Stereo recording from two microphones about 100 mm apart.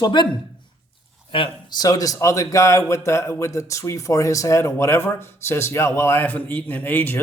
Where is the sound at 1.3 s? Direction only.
60° left (ahead or behind).